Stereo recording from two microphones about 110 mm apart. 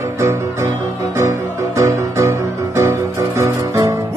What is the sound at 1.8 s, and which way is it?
Music, 25° right (ahead or behind).